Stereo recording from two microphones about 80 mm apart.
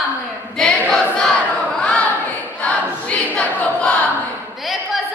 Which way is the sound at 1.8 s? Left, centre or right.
Centre.